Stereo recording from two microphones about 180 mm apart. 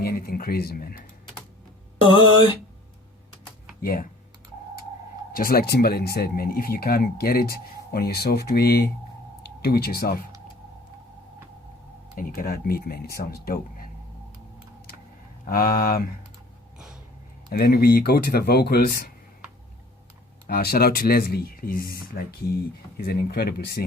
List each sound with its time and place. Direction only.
0.0 s speech: 55° left (ahead or behind)
3.8 s speech: 55° left (ahead or behind)
5.3 s speech: 55° left (ahead or behind)
12.1 s speech: 50° left (ahead or behind)
15.4 s speech: 50° left (ahead or behind)
16.7 s a sound: 5° right (ahead or behind)
17.5 s speech: 55° left (ahead or behind)
20.5 s speech: 60° left (ahead or behind)